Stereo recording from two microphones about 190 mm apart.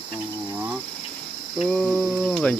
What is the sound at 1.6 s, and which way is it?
Cricket, 5° left (ahead or behind).